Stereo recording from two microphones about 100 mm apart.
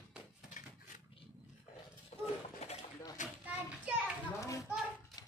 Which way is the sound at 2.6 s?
90° left.